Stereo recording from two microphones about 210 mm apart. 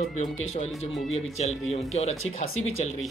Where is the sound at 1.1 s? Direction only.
30° left (ahead or behind).